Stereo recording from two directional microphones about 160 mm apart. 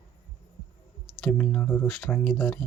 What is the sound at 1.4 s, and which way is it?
Speech, 15° left (ahead or behind).